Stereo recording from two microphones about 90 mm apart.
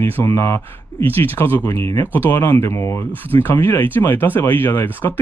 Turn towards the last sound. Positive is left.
turn(degrees=20)  # may be behind; listen again after turning